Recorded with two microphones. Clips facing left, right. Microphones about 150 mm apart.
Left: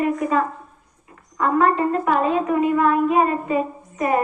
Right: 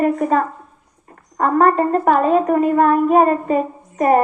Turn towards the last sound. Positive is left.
turn(degrees=-45)  # may be behind; listen again after turning